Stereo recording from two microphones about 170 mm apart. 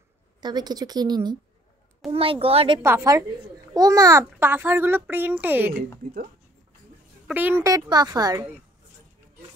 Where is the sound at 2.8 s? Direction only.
15° right (ahead or behind).